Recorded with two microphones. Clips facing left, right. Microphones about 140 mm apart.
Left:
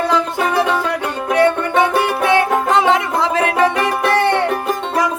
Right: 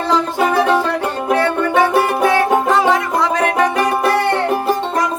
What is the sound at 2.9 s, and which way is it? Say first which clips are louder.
Music: even; 25° left (ahead or behind).